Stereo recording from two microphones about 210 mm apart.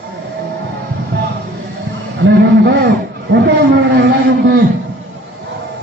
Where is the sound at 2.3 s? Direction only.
50° right (ahead or behind).